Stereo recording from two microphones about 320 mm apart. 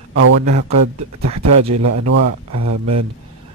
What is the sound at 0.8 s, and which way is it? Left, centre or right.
Speech, right.